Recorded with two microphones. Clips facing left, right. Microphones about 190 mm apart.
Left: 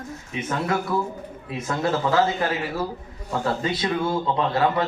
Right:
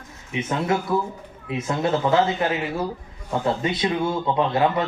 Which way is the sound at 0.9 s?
25° right (ahead or behind).